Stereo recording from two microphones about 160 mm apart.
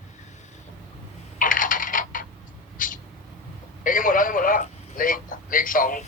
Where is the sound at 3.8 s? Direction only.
60° left (ahead or behind).